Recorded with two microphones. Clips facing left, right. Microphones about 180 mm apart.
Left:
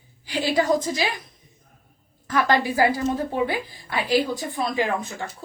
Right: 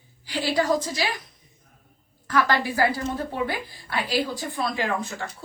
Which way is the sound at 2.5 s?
15° left (ahead or behind).